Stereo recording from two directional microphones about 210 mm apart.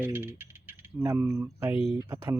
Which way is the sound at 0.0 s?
10° right (ahead or behind).